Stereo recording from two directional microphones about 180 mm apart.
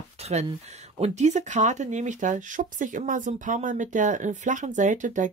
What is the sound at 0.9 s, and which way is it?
Speech, 40° right (ahead or behind).